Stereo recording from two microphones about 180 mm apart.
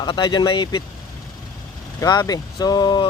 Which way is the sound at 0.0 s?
25° left (ahead or behind).